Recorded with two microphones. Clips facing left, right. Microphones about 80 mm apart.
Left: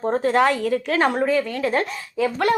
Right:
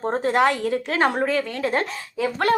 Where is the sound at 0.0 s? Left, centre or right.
Right.